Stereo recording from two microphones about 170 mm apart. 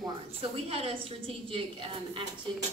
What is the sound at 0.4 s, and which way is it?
A woman's voice, 35° right (ahead or behind).